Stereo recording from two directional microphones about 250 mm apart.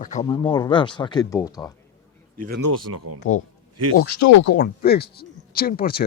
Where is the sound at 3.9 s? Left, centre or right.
Left.